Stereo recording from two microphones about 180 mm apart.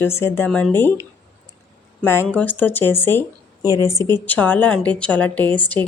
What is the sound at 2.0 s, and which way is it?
A woman's voice, 15° left (ahead or behind).